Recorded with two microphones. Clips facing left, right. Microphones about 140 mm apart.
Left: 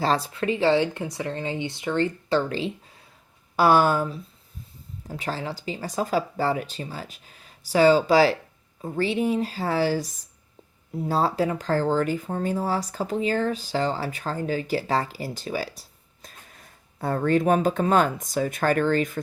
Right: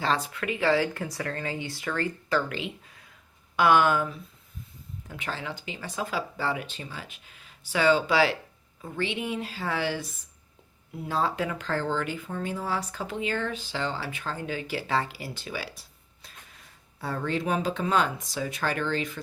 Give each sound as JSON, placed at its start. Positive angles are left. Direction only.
{"t": 0.0, "sound": "speech", "side_deg": 35}